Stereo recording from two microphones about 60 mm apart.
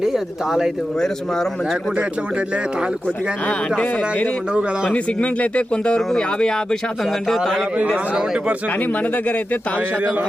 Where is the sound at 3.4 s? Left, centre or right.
Centre.